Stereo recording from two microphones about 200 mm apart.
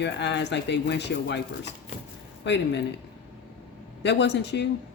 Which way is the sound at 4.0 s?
60° left (ahead or behind).